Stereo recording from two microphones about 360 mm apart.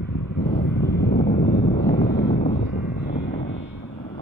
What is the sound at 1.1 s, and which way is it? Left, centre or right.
Wind noise, left.